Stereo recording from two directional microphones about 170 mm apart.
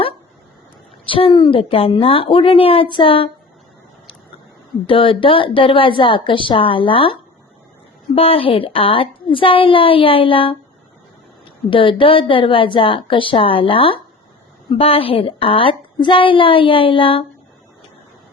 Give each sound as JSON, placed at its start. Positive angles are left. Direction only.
{"t": 1.0, "sound": "speech", "side_deg": 30}
{"t": 4.9, "sound": "speech", "side_deg": 30}
{"t": 11.7, "sound": "speech", "side_deg": 30}